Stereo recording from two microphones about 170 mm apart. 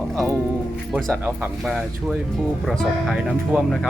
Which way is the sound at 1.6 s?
Centre (ahead or behind).